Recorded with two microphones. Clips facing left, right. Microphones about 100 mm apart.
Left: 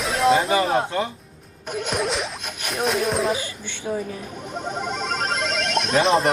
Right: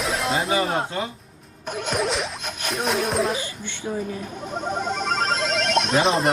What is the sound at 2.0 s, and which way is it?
Speech, centre (ahead or behind).